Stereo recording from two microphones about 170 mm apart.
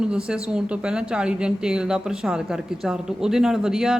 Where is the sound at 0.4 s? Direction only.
5° right (ahead or behind).